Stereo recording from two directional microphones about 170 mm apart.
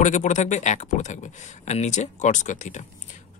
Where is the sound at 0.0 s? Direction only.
45° left (ahead or behind).